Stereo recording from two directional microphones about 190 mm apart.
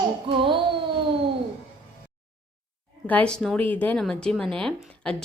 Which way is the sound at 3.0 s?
5° left (ahead or behind).